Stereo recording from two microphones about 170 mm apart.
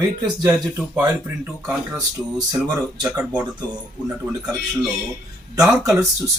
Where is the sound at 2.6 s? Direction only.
25° right (ahead or behind).